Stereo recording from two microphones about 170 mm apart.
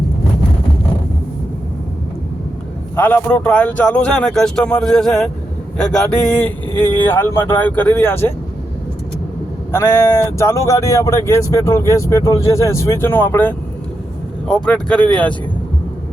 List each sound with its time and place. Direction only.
2.9 s speech: 10° left (ahead or behind)
9.7 s speech: 20° left (ahead or behind)